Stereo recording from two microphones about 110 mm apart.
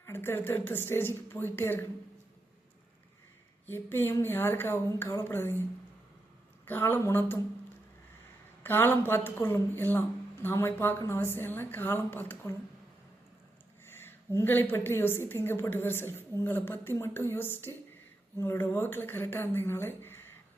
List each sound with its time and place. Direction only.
0.0 s a woman's voice: 20° left (ahead or behind)
3.7 s a woman's voice: 20° left (ahead or behind)
6.7 s a woman's voice: 20° left (ahead or behind)
8.6 s a woman's voice: 20° left (ahead or behind)
13.8 s a woman's voice: 20° left (ahead or behind)